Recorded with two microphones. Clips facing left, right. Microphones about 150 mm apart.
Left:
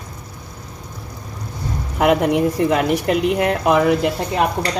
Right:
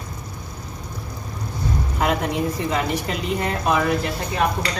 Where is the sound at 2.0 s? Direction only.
65° left (ahead or behind).